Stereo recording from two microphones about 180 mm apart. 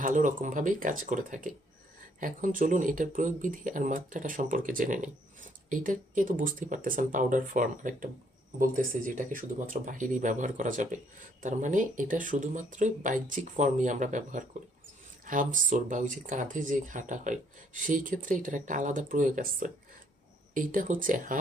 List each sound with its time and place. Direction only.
0.0 s speech: 45° right (ahead or behind)